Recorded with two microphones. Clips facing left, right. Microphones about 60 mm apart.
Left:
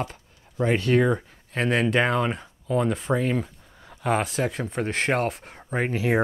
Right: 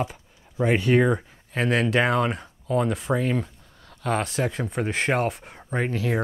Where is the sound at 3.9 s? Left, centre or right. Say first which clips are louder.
Left 2 dB; centre.